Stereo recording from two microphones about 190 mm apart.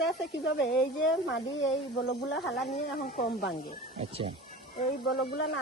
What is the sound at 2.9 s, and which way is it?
Speech, 50° left (ahead or behind).